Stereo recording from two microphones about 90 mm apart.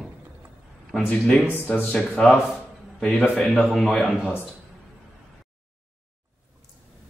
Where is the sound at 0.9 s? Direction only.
10° left (ahead or behind).